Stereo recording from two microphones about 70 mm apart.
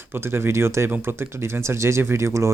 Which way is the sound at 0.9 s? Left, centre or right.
Right.